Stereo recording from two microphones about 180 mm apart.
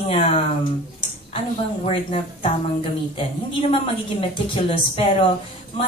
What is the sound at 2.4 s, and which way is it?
A woman's voice, 30° left (ahead or behind).